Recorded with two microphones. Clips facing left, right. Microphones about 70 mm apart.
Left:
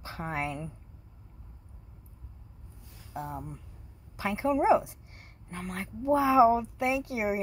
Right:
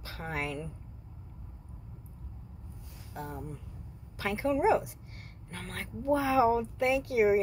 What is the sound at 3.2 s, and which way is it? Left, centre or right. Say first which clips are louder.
Speech: left 3 dB; left.